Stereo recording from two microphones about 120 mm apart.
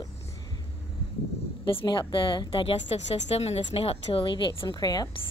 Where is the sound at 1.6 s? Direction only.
45° left (ahead or behind).